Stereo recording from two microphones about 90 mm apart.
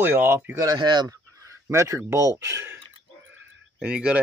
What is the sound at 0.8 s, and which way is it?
Speech, 55° right (ahead or behind).